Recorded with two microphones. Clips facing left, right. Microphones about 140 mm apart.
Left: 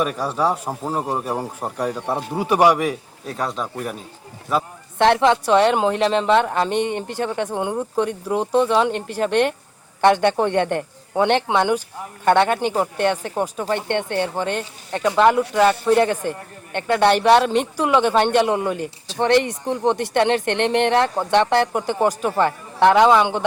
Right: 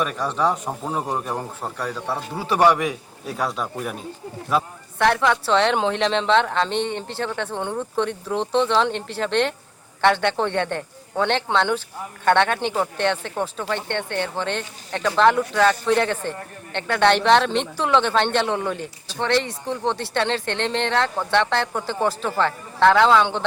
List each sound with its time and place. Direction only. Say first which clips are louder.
0.0 s speech: left 1 dB; 5° left (ahead or behind)
2.8 s speech: left 2 dB; centre (ahead or behind)
4.9 s speech: left 4 dB; 25° left (ahead or behind); by 19.2 s 5° left (ahead or behind)
19.2 s speech: left 5 dB; 15° left (ahead or behind)